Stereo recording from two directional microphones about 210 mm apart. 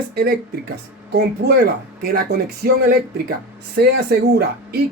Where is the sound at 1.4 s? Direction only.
55° right (ahead or behind).